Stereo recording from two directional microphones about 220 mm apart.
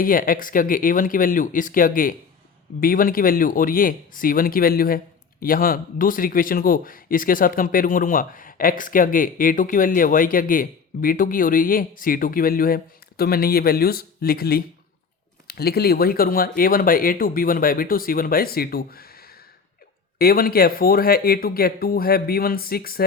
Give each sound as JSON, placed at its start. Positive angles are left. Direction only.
{"t": 0.0, "sound": "speech", "side_deg": 40}